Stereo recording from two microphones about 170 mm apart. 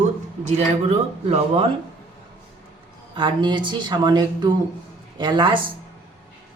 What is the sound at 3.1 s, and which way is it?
Speech, 30° right (ahead or behind).